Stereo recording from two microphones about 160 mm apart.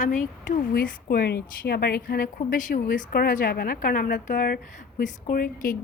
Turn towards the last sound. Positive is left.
turn(degrees=60)  # may be behind; listen again after turning